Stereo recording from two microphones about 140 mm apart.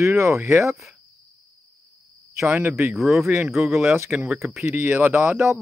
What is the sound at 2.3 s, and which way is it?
A man's voice, 15° right (ahead or behind).